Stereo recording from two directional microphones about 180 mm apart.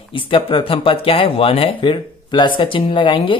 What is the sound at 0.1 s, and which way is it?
Speech, 30° left (ahead or behind).